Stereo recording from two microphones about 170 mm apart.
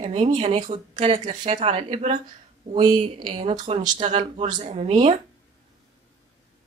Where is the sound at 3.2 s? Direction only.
35° right (ahead or behind).